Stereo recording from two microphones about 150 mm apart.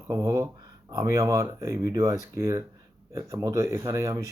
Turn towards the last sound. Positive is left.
turn(degrees=-20)  # may be behind; listen again after turning